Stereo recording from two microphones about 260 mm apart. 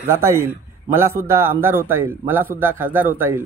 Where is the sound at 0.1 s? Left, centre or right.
Centre.